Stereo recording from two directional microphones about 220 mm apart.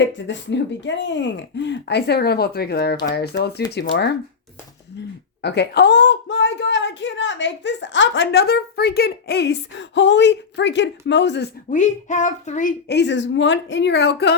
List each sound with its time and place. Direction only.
0.0 s speech: 55° left (ahead or behind)
5.4 s speech: 50° left (ahead or behind)
11.7 s speech: 35° left (ahead or behind); by 14.3 s 50° left (ahead or behind)